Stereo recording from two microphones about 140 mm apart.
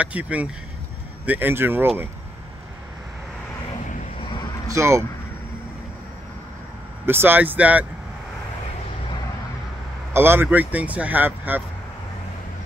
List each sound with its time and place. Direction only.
0.0 s speech: 10° right (ahead or behind)
4.6 s speech: 20° right (ahead or behind)
7.1 s speech: 15° right (ahead or behind)
10.1 s speech: 15° right (ahead or behind)